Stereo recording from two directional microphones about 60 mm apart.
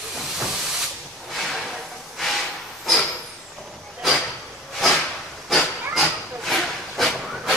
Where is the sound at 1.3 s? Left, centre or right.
Centre.